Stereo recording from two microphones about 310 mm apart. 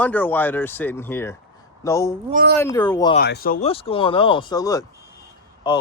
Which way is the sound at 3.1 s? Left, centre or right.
Left.